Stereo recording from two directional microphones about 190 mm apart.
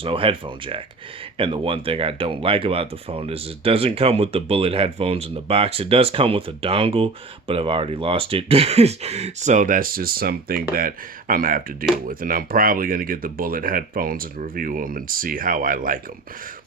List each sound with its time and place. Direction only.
0.0 s speech: 30° right (ahead or behind); by 16.0 s 45° right (ahead or behind)